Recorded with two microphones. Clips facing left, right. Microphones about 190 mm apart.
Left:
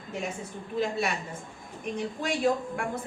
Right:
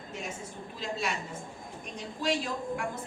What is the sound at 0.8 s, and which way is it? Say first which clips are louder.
Speech: left 6 dB; 60° left (ahead or behind).